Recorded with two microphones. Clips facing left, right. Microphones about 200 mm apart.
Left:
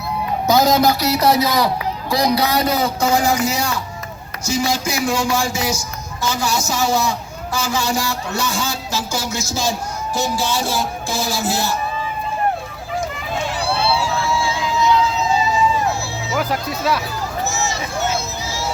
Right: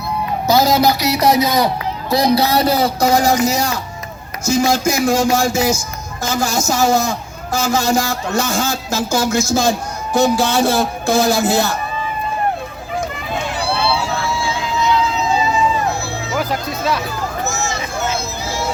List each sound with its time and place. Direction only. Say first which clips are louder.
0.4 s a man's voice: right 1 dB; 5° right (ahead or behind); by 11.8 s 60° right (ahead or behind)
13.3 s run: right 1 dB; 60° right (ahead or behind)
14.2 s a sound: left 1 dB; 60° right (ahead or behind)
16.3 s speech: even; 10° left (ahead or behind)
17.4 s vehicle: left 1 dB; 50° right (ahead or behind)